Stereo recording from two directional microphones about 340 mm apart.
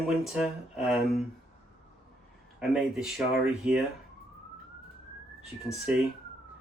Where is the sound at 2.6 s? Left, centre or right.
Centre.